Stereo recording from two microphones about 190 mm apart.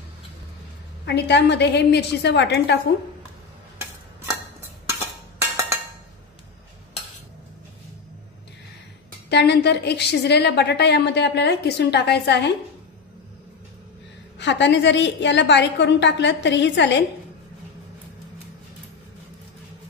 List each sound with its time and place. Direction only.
1.0 s a woman's voice: 65° left (ahead or behind)
9.3 s a woman's voice: 60° left (ahead or behind)
14.4 s a woman's voice: 70° left (ahead or behind)